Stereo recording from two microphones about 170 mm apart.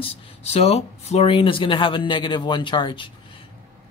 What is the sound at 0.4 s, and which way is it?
Speech, 40° left (ahead or behind).